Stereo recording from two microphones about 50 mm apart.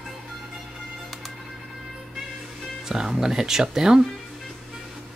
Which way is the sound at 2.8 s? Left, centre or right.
Centre.